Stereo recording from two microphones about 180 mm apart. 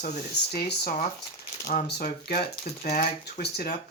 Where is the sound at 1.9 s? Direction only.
60° left (ahead or behind).